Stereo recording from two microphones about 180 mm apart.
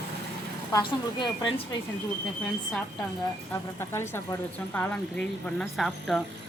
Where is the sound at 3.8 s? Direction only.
15° left (ahead or behind).